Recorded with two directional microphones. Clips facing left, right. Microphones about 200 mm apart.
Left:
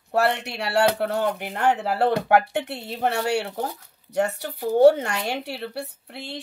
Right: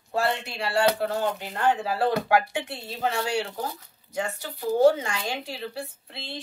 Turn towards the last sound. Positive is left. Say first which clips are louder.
# left 3 dB
turn(degrees=70)  # may be behind; listen again after turning